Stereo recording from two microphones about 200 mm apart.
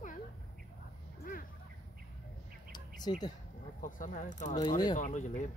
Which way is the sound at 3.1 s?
25° left (ahead or behind).